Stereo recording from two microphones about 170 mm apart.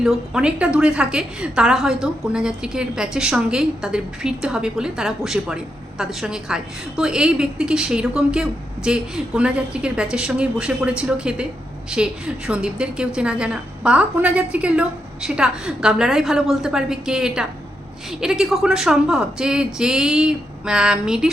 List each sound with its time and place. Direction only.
0.0 s a woman's voice: 5° right (ahead or behind)